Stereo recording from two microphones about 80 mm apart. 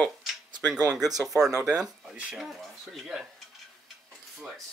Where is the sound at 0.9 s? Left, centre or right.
Centre.